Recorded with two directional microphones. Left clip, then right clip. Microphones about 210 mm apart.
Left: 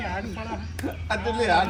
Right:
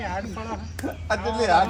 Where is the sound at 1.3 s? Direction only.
20° right (ahead or behind).